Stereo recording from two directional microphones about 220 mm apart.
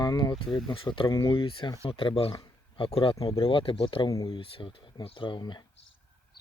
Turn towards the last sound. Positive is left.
turn(degrees=20)  # may be behind; listen again after turning